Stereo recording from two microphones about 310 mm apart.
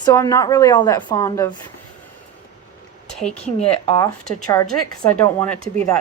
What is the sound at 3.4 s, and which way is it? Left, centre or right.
Speech, centre.